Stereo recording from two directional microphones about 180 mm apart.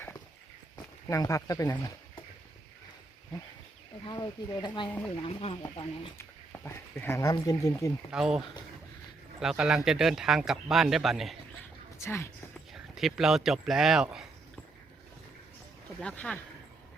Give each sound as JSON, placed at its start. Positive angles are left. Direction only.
{"t": 1.0, "sound": "speech", "side_deg": 20}
{"t": 4.0, "sound": "speech", "side_deg": 25}
{"t": 4.9, "sound": "speech", "side_deg": 10}
{"t": 5.1, "sound": "speech", "side_deg": 30}
{"t": 6.1, "sound": "speech", "side_deg": 15}
{"t": 8.1, "sound": "speech", "side_deg": -5}
{"t": 11.9, "sound": "speech", "side_deg": 15}
{"t": 12.7, "sound": "speech", "side_deg": 0}
{"t": 16.0, "sound": "speech", "side_deg": 5}